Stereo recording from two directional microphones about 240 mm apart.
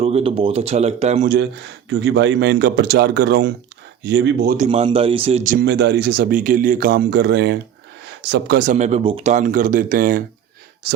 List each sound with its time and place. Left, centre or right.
0.0 s speech: right
1.9 s a man's voice: right
5.6 s a man's voice: right